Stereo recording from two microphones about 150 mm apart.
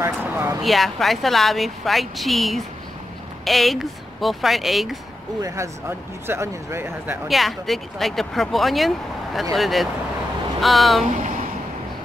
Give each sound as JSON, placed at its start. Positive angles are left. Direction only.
{"t": 0.0, "sound": "speech", "side_deg": -15}
{"t": 0.6, "sound": "speech", "side_deg": 0}
{"t": 5.4, "sound": "speech", "side_deg": -15}
{"t": 7.2, "sound": "speech", "side_deg": 0}